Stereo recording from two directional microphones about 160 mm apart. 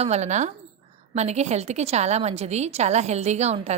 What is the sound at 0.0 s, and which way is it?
A woman's voice, 45° right (ahead or behind).